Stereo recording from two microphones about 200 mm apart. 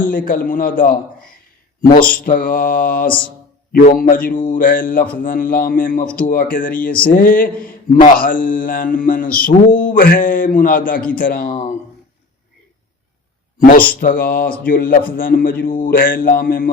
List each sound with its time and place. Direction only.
0.0 s speech: 45° left (ahead or behind)
1.8 s speech: 45° left (ahead or behind)
14.0 s speech: 45° left (ahead or behind)